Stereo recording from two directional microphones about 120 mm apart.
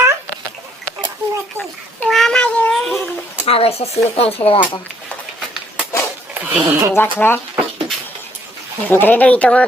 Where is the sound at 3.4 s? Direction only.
55° left (ahead or behind).